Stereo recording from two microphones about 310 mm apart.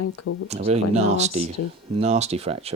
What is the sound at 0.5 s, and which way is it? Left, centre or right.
Speech, right.